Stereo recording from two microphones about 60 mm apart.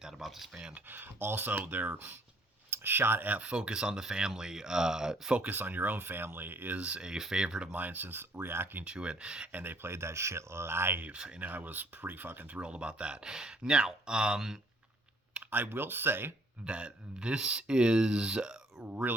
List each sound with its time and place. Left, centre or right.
0.0 s a sound: centre
0.5 s speech: centre
0.9 s speech: right
3.4 s speech: centre
5.4 s speech: right
6.7 s speech: centre
7.7 s speech: right
8.8 s speech: centre
9.5 s speech: right
9.8 s speech: right
11.0 s speech: right
12.6 s speech: centre
15.3 s speech: right
16.6 s speech: centre